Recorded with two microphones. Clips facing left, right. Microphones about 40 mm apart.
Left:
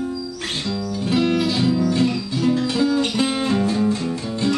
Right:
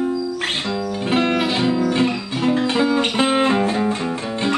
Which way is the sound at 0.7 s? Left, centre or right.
Right.